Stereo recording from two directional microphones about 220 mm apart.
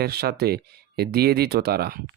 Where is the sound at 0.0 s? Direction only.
45° right (ahead or behind).